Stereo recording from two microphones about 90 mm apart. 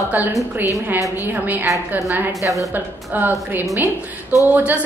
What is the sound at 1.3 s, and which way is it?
Speech, 20° right (ahead or behind).